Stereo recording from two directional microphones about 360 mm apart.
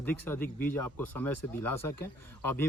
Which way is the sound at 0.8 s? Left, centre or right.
Left.